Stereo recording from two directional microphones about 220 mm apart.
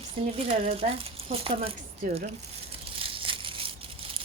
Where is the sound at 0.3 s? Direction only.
25° right (ahead or behind).